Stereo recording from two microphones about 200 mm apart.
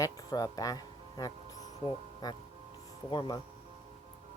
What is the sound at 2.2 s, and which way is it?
Speech, 20° left (ahead or behind).